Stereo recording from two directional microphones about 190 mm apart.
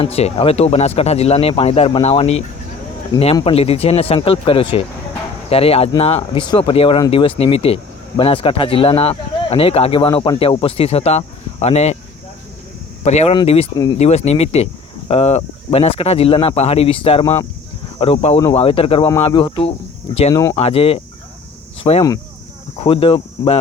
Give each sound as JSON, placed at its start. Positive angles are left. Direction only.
{"t": 0.0, "sound": "speech", "side_deg": 35}
{"t": 13.1, "sound": "speech", "side_deg": 35}
{"t": 20.6, "sound": "speech", "side_deg": 30}